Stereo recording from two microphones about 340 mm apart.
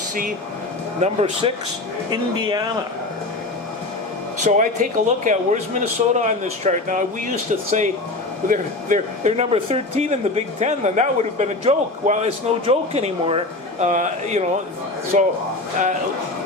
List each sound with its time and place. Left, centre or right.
1.0 s speech: centre
4.4 s speech: right
8.4 s speech: right